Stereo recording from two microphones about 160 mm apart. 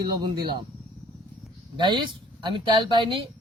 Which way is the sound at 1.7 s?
30° right (ahead or behind).